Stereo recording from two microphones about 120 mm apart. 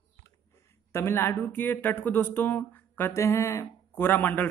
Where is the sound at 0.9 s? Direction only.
20° left (ahead or behind).